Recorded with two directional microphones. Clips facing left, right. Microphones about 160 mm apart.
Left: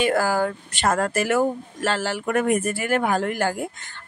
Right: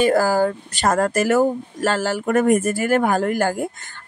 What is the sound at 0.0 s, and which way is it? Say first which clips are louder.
Speech: right 4 dB; 40° right (ahead or behind).